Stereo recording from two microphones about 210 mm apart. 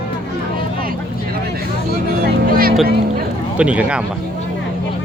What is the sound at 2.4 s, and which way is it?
Speech, 45° right (ahead or behind).